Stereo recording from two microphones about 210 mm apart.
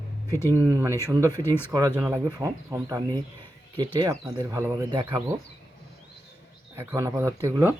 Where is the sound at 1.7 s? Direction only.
15° right (ahead or behind).